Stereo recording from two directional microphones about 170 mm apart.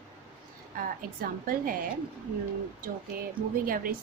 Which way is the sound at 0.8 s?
55° right (ahead or behind).